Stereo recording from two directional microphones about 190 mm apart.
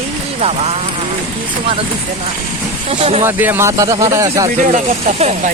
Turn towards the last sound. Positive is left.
turn(degrees=-35)  # may be behind; listen again after turning